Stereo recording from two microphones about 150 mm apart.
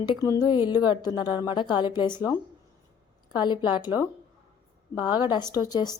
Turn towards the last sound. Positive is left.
turn(degrees=25)  # may be behind; listen again after turning